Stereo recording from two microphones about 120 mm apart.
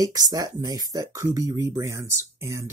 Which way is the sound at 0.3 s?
30° right (ahead or behind).